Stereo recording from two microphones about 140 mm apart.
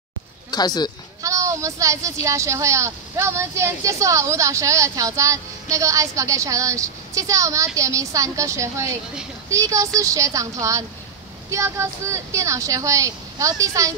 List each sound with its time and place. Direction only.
0.5 s speech: 30° left (ahead or behind)
1.2 s a sound: 20° right (ahead or behind)
2.2 s a woman's voice: 20° right (ahead or behind)